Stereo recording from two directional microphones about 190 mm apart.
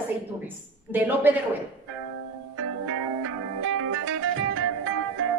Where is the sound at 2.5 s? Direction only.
90° right.